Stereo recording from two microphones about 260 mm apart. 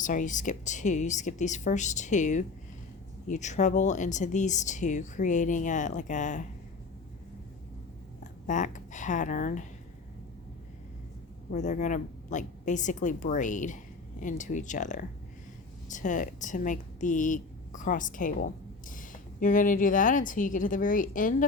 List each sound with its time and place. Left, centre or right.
0.0 s speech: left
8.2 s speech: left
11.5 s speech: left